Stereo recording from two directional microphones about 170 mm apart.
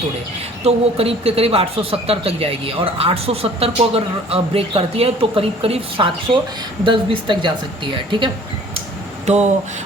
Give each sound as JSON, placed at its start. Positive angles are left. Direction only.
{"t": 0.6, "sound": "speech", "side_deg": -35}
{"t": 9.2, "sound": "speech", "side_deg": -40}